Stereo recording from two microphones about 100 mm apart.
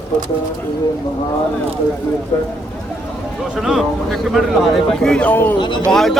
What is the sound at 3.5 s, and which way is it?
A man's voice, centre (ahead or behind).